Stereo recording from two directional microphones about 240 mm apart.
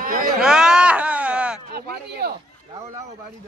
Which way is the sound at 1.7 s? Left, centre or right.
Right.